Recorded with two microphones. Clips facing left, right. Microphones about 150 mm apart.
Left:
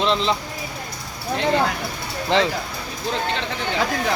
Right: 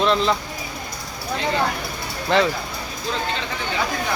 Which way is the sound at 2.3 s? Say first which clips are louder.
Right 1 dB; 20° left (ahead or behind).